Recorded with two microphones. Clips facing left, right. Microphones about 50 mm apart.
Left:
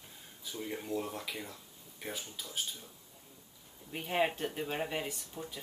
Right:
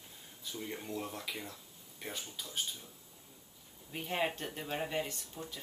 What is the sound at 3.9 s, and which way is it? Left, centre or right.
Speech, centre.